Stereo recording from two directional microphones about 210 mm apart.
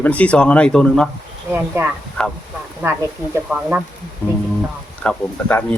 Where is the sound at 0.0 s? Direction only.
5° left (ahead or behind).